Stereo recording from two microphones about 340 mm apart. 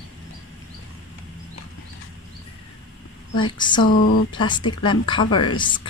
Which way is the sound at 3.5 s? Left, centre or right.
Centre.